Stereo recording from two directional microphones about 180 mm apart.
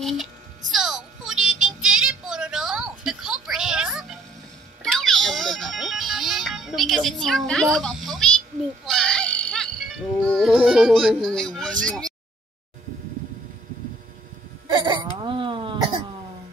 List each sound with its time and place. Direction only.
0.0 s music: centre (ahead or behind)
7.6 s a sound: centre (ahead or behind)
8.8 s music: centre (ahead or behind)
14.7 s hiccup: 25° right (ahead or behind)